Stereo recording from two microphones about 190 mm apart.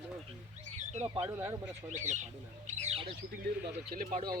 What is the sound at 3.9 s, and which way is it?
Speech, 50° right (ahead or behind).